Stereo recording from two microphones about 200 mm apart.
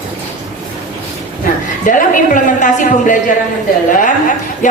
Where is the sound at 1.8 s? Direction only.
40° left (ahead or behind).